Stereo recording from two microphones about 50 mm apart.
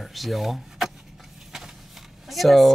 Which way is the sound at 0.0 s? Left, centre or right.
Centre.